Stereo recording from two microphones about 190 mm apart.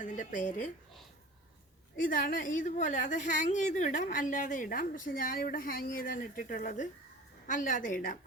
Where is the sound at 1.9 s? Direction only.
45° left (ahead or behind).